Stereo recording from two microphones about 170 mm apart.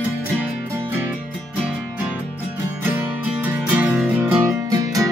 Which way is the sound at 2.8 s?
10° right (ahead or behind).